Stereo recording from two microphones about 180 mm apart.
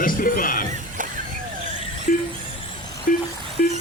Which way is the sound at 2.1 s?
50° left (ahead or behind).